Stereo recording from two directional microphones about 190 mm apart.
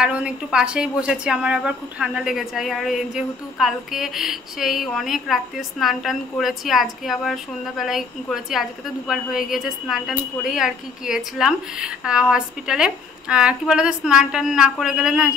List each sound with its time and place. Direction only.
0.0 s speech: 5° right (ahead or behind)